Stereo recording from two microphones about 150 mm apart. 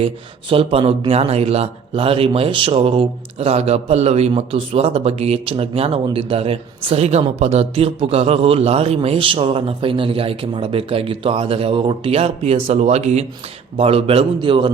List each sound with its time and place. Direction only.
0.5 s a woman's voice: 40° right (ahead or behind)